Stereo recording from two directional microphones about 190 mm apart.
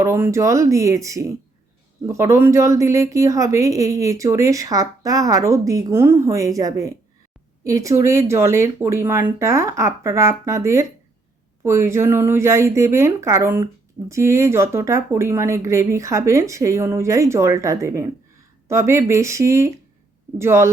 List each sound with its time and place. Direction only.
0.0 s a woman's voice: 15° right (ahead or behind)